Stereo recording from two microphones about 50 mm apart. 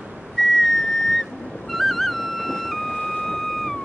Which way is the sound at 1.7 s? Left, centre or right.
Centre.